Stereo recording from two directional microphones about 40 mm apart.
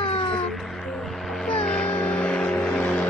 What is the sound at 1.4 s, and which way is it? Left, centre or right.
Vehicle, left.